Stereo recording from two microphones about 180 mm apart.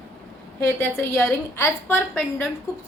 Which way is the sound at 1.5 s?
15° left (ahead or behind).